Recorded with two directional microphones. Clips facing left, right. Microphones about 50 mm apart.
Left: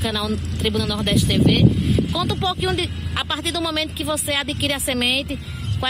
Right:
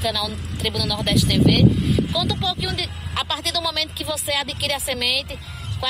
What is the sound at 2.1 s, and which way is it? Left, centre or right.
Speech, left.